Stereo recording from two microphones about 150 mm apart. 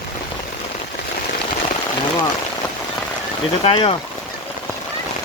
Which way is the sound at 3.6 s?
40° left (ahead or behind).